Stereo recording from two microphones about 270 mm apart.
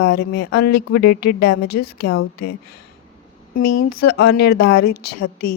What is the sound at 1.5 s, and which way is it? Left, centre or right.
Speech, left.